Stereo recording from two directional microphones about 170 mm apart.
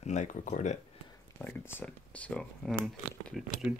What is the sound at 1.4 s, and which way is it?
Speech, 15° left (ahead or behind).